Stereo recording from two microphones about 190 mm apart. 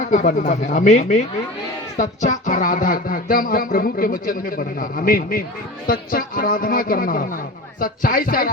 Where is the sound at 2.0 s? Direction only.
40° left (ahead or behind).